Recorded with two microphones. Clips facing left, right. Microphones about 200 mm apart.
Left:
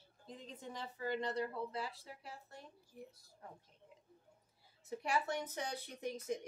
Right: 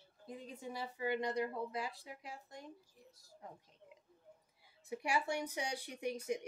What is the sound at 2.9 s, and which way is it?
Speech, 60° left (ahead or behind).